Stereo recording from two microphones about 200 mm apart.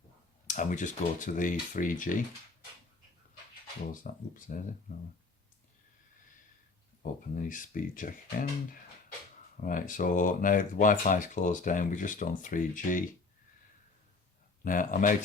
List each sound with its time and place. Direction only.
0.4 s speech: 40° left (ahead or behind)
4.0 s speech: 40° left (ahead or behind)
7.0 s speech: 40° left (ahead or behind)
14.6 s speech: 45° left (ahead or behind)